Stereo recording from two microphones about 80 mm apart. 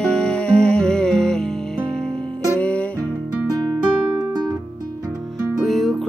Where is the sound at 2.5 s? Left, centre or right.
Centre.